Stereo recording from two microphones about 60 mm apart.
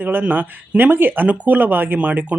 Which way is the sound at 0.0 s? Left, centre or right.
Right.